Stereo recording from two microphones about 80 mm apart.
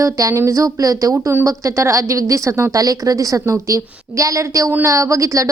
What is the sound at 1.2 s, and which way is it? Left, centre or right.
A woman's voice, right.